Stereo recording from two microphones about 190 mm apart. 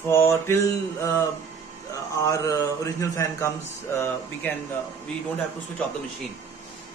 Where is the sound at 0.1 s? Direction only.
15° left (ahead or behind).